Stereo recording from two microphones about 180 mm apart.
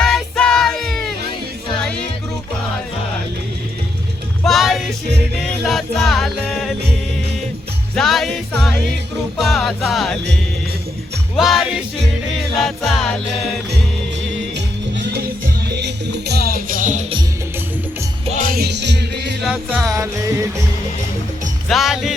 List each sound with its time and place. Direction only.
0.0 s music: 5° left (ahead or behind)
4.4 s music: centre (ahead or behind)
7.9 s music: centre (ahead or behind)
11.3 s music: centre (ahead or behind)
14.5 s music: 75° right (ahead or behind); by 17.1 s 45° right (ahead or behind)
18.3 s music: 50° right (ahead or behind); by 19.4 s 70° right (ahead or behind)
19.4 s music: 5° right (ahead or behind)
21.7 s music: centre (ahead or behind)